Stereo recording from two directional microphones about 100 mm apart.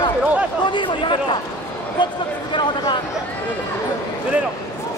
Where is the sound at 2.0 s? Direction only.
50° left (ahead or behind).